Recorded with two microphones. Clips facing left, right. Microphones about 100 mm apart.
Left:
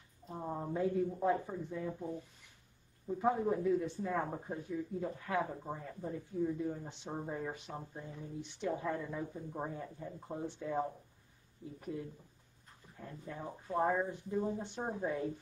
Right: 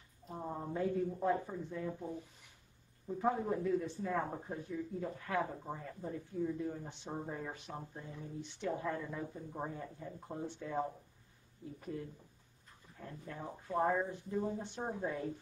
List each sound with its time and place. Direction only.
0.4 s speech: 5° left (ahead or behind)
3.1 s a man's voice: 5° left (ahead or behind)
3.8 s speech: 15° left (ahead or behind)